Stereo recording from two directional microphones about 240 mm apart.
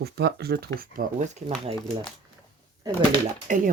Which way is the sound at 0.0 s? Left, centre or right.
Right.